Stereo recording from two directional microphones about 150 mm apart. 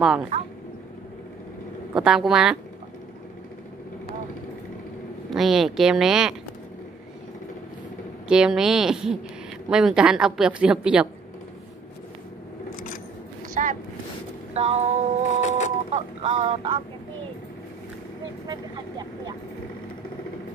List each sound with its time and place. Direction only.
0.0 s a woman's voice: centre (ahead or behind)
2.0 s a woman's voice: 5° right (ahead or behind)
5.3 s a woman's voice: centre (ahead or behind)
8.3 s a woman's voice: 5° right (ahead or behind)
13.6 s a sound: 55° right (ahead or behind)
14.5 s a sound: 45° right (ahead or behind)
18.5 s speech: 30° right (ahead or behind)